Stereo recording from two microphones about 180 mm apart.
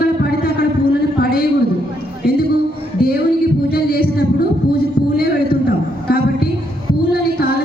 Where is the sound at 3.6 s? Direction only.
60° left (ahead or behind).